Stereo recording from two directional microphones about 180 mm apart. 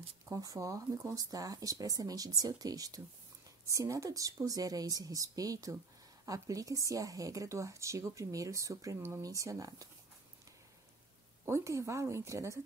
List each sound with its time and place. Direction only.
0.3 s a woman's voice: 20° right (ahead or behind)
11.4 s a woman's voice: 15° right (ahead or behind)